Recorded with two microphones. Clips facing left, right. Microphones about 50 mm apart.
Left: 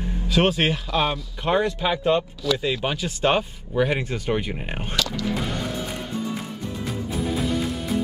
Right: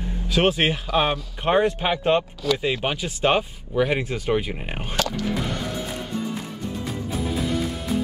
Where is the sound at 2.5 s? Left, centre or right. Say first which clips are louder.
Even; right; by 4.8 s centre.